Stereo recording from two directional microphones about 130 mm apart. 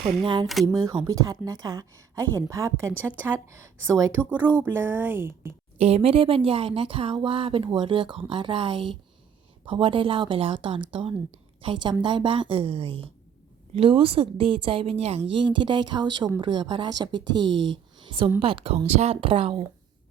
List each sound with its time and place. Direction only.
0.0 s speech: centre (ahead or behind)
0.6 s a woman's voice: 30° right (ahead or behind)
4.4 s speech: 15° right (ahead or behind)
5.7 s a woman's voice: 50° right (ahead or behind)